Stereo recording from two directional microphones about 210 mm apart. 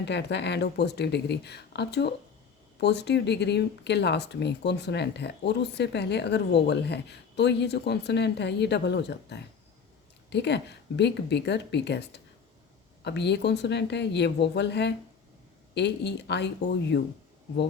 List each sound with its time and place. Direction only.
0.0 s a woman's voice: 55° left (ahead or behind)